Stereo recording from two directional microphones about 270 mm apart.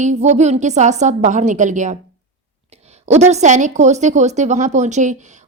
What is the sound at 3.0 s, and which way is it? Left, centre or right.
A woman's voice, right.